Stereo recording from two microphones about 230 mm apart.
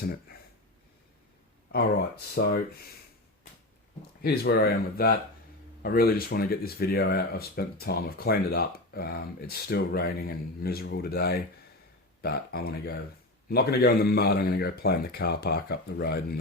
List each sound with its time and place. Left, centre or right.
0.0 s speech: left
2.3 s speech: left
4.2 s speech: left